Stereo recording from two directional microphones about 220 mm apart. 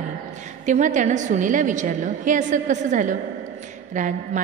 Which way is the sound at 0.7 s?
35° right (ahead or behind).